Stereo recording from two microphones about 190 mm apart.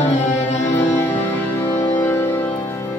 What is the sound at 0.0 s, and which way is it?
Music, 35° left (ahead or behind).